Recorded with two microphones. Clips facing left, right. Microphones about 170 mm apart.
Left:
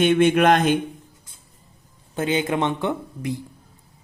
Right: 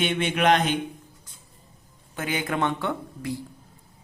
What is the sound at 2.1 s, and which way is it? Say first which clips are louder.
Speech: left 5 dB; 25° left (ahead or behind).